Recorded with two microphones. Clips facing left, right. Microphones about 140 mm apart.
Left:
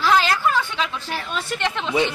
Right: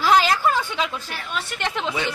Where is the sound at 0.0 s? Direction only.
15° right (ahead or behind).